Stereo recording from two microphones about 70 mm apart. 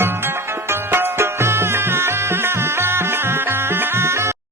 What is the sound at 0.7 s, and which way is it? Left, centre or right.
Music, right.